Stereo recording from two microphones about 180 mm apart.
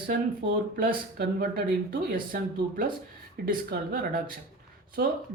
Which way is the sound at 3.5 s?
55° right (ahead or behind).